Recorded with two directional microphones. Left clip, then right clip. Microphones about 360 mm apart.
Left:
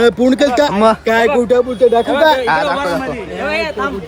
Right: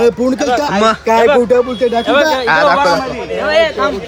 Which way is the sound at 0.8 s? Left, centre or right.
Centre.